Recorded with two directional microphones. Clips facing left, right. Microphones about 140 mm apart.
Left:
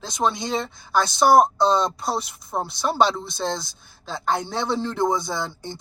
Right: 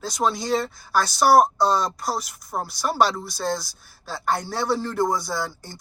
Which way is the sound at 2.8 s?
Centre (ahead or behind).